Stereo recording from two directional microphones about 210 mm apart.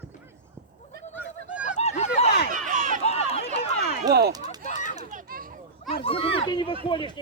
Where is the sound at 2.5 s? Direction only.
35° right (ahead or behind).